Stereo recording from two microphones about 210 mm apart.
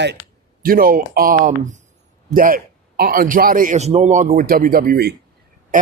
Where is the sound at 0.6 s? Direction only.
45° right (ahead or behind).